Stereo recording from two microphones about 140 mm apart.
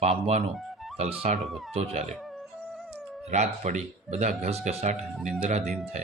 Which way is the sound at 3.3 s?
55° right (ahead or behind).